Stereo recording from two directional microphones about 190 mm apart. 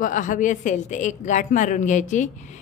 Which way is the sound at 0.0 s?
45° left (ahead or behind).